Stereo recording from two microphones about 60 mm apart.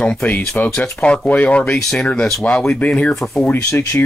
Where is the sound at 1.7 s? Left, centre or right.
Centre; by 3.4 s left.